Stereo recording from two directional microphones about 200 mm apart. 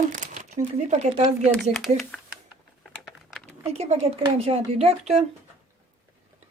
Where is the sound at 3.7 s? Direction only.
30° right (ahead or behind).